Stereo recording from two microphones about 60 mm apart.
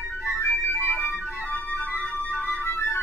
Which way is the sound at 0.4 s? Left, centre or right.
Left.